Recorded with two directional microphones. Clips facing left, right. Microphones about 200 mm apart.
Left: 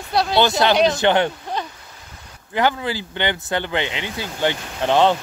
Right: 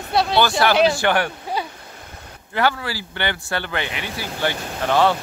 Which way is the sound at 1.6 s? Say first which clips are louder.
Right 1 dB; 10° right (ahead or behind).